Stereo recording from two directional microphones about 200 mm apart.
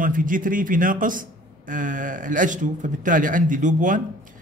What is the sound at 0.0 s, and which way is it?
A man's voice, 40° right (ahead or behind).